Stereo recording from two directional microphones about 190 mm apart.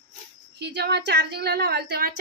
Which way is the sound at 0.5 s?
60° right (ahead or behind).